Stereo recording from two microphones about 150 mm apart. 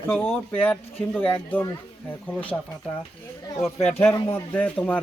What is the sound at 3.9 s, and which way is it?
Speech, 15° left (ahead or behind).